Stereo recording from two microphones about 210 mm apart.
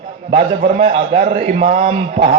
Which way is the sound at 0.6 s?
40° right (ahead or behind).